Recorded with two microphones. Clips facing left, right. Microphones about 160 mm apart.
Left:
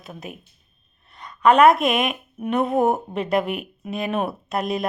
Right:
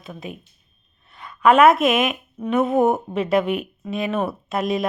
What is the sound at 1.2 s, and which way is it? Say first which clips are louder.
A woman's voice: right 1 dB; 5° right (ahead or behind).